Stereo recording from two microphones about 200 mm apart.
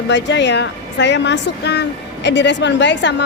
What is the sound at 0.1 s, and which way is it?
A woman's voice, 65° left (ahead or behind).